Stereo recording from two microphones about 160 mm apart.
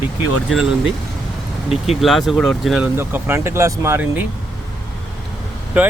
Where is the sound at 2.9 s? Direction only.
15° right (ahead or behind).